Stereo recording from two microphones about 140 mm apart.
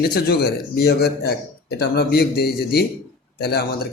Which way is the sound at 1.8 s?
90° left.